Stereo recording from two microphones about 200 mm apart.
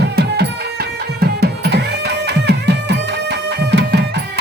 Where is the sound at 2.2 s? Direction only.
55° right (ahead or behind).